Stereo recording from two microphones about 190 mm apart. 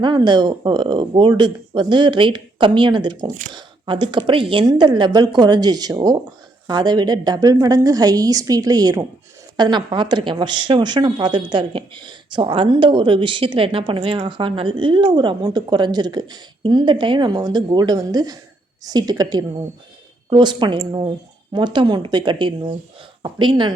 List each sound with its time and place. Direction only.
0.0 s a woman's voice: 25° right (ahead or behind)